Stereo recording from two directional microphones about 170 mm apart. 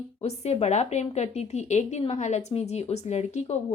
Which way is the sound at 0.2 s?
40° left (ahead or behind).